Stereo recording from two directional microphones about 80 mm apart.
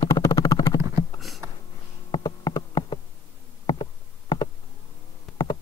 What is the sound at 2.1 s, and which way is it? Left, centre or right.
Insect, left.